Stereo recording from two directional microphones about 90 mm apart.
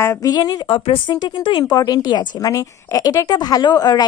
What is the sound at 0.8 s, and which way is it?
Speech, 90° left.